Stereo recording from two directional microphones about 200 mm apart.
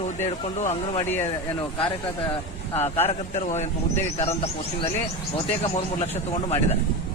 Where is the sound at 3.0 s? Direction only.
35° left (ahead or behind).